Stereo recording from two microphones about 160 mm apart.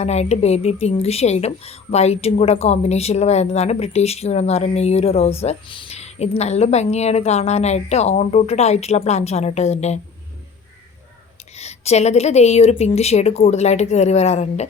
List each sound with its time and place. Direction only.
0.0 s speech: 45° left (ahead or behind)
11.5 s speech: 40° left (ahead or behind)